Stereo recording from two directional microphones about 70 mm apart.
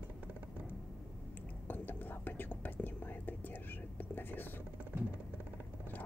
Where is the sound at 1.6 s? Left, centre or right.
Left.